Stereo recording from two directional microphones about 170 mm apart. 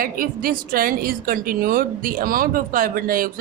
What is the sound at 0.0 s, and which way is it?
A woman's voice, 60° right (ahead or behind).